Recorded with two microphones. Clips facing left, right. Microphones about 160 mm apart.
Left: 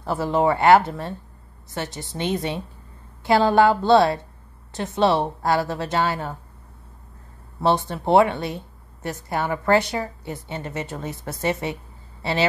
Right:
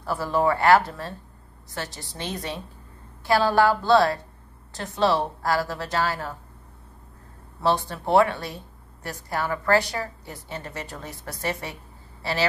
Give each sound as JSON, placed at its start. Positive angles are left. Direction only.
{"t": 0.0, "sound": "speech", "side_deg": 20}
{"t": 7.6, "sound": "speech", "side_deg": 20}